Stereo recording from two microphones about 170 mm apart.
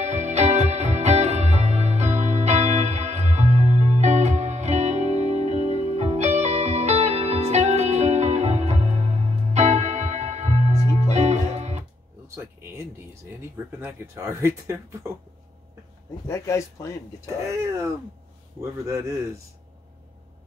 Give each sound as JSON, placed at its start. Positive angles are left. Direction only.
{"t": 0.0, "sound": "music", "side_deg": -40}
{"t": 13.4, "sound": "speech", "side_deg": -15}
{"t": 16.3, "sound": "speech", "side_deg": 15}
{"t": 17.5, "sound": "speech", "side_deg": -15}